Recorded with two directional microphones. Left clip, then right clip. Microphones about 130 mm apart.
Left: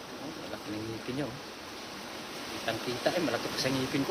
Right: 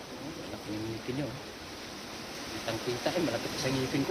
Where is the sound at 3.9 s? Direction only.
15° left (ahead or behind).